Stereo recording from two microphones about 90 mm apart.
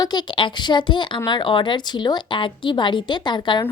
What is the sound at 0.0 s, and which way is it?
A woman's voice, 50° left (ahead or behind).